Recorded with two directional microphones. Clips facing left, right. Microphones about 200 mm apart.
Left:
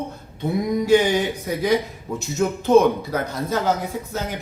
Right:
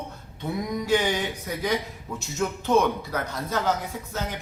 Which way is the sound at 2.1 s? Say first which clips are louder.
Left 6 dB; 30° left (ahead or behind).